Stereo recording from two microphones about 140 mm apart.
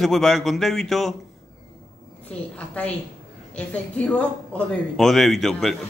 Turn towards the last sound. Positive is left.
turn(degrees=0)  # may be behind; listen again after turning